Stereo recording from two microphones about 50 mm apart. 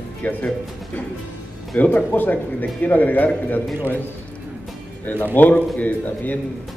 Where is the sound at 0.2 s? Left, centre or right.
Left.